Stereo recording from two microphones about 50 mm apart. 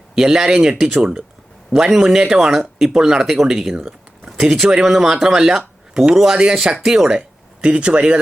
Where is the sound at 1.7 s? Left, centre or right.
Centre.